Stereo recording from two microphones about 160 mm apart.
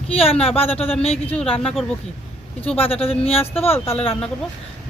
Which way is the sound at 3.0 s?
35° left (ahead or behind).